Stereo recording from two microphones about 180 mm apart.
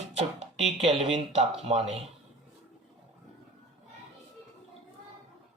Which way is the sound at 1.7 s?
35° right (ahead or behind).